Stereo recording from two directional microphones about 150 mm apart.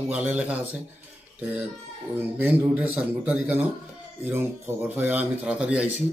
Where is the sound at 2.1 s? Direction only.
10° right (ahead or behind).